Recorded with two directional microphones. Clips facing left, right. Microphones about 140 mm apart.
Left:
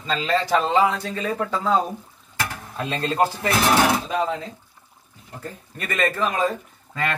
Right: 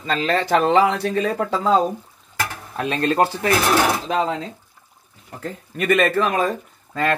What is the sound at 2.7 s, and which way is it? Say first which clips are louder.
Speech: right 3 dB; 75° right (ahead or behind).